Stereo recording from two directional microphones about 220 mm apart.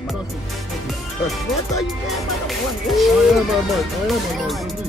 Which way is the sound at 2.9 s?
Centre (ahead or behind).